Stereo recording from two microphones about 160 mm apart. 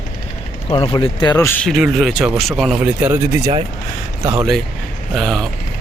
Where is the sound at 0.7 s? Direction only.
35° left (ahead or behind).